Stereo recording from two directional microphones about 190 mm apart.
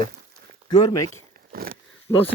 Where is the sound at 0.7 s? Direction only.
20° left (ahead or behind).